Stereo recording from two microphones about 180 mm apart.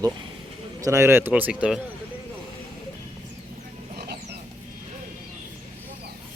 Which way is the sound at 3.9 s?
65° right (ahead or behind).